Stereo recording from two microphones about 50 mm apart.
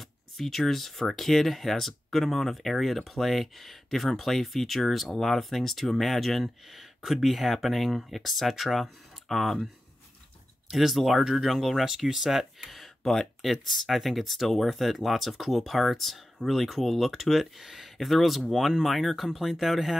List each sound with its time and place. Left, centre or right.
0.0 s speech: centre
10.7 s speech: centre